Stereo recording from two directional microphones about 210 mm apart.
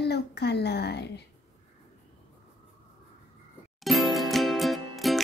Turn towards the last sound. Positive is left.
turn(degrees=0)  # may be behind; listen again after turning